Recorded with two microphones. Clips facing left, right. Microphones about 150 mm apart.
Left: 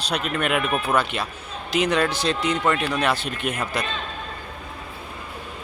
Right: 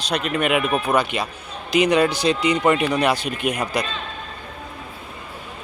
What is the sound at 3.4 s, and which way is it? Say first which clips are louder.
Speech: right 4 dB; 15° right (ahead or behind).